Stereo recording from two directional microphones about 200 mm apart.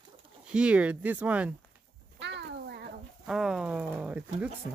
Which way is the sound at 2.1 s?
60° right (ahead or behind).